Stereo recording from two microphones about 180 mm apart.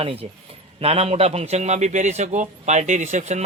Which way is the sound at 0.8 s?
35° right (ahead or behind).